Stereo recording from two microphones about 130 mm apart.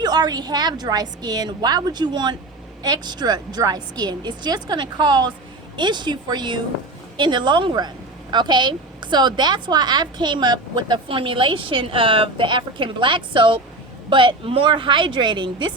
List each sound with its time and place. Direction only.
0.0 s a woman's voice: 30° right (ahead or behind)